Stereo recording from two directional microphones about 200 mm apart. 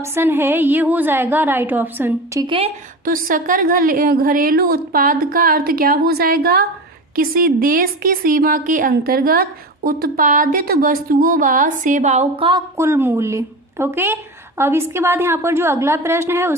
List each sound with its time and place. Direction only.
0.0 s a woman's voice: 10° right (ahead or behind); by 2.7 s 25° right (ahead or behind)
3.0 s a woman's voice: 45° right (ahead or behind); by 16.6 s 10° right (ahead or behind)